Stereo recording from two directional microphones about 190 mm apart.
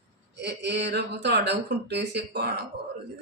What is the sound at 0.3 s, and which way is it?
Speech, 65° right (ahead or behind).